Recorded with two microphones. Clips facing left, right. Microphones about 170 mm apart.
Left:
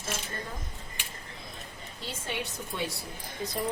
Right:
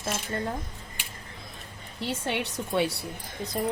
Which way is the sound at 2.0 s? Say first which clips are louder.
Right 6 dB; 70° right (ahead or behind).